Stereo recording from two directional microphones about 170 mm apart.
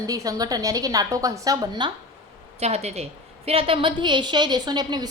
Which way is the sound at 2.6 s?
40° right (ahead or behind).